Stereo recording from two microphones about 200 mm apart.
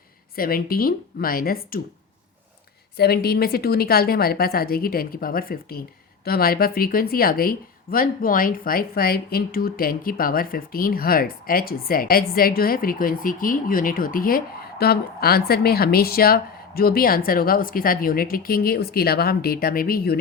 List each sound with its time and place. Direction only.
0.3 s speech: 45° left (ahead or behind)
3.0 s speech: 50° left (ahead or behind)